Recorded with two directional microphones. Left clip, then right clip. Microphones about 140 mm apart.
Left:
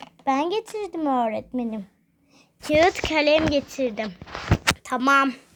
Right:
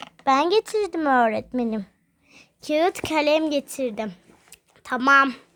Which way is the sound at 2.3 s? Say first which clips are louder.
Left 2 dB; 35° right (ahead or behind).